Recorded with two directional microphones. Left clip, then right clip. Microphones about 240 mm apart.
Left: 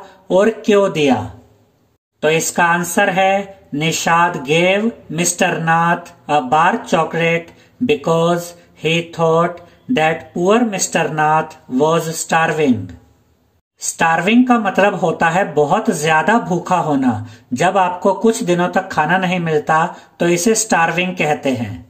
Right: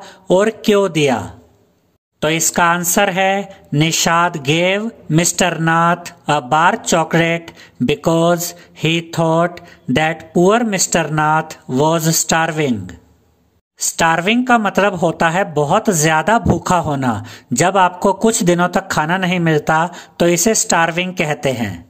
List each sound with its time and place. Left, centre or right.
0.3 s speech: right